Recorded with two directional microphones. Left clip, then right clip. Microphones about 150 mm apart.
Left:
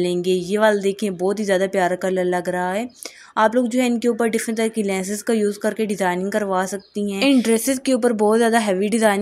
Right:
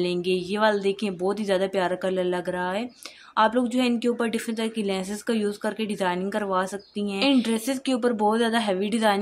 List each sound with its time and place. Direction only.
0.0 s speech: 30° left (ahead or behind)